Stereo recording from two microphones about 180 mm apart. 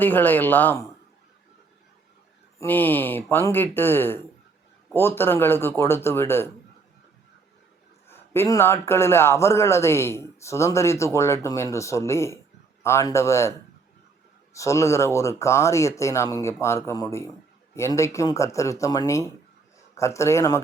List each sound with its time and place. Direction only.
0.0 s a man's voice: 10° left (ahead or behind)
2.6 s a man's voice: 10° left (ahead or behind)
8.0 s a man's voice: 15° left (ahead or behind)
14.5 s a man's voice: 15° left (ahead or behind)